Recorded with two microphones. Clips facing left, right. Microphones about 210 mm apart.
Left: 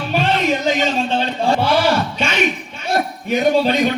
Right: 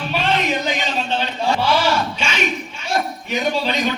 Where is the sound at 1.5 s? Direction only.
55° left (ahead or behind).